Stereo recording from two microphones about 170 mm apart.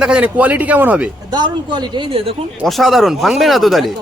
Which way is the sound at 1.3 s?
25° right (ahead or behind).